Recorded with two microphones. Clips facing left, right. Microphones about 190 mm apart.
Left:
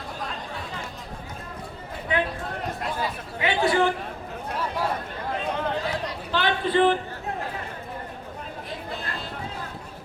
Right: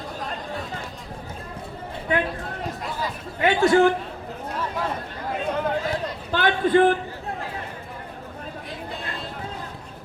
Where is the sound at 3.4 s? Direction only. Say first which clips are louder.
Right 5 dB; 45° right (ahead or behind).